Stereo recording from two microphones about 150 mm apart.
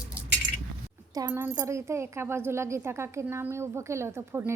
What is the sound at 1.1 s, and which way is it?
Speech, 20° right (ahead or behind).